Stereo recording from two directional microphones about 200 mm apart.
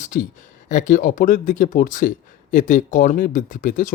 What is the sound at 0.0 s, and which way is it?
Speech, 45° left (ahead or behind).